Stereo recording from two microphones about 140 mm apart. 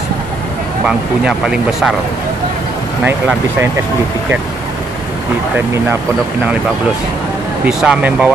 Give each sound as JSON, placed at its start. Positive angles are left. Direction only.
{"t": 0.8, "sound": "speech", "side_deg": -5}
{"t": 7.6, "sound": "speech", "side_deg": -5}